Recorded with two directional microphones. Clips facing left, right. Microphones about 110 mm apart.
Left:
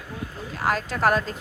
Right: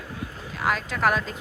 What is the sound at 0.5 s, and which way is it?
Speech, 40° left (ahead or behind).